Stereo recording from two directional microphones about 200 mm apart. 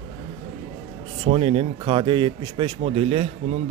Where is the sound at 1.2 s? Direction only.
30° right (ahead or behind).